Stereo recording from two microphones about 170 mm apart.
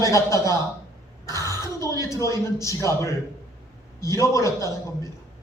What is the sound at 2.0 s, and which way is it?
Speech, 20° left (ahead or behind).